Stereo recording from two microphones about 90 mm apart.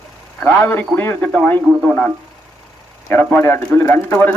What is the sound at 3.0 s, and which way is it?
Speech, 20° left (ahead or behind).